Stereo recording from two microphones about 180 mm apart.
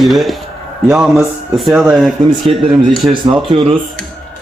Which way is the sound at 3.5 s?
30° right (ahead or behind).